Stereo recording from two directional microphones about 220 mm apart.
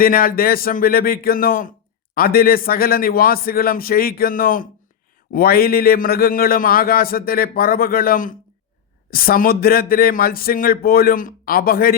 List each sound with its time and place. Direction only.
0.0 s a man's voice: 40° left (ahead or behind)